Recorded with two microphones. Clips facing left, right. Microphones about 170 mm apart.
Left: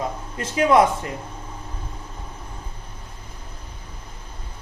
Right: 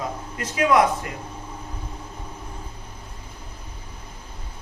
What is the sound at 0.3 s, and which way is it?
Speech, 30° left (ahead or behind).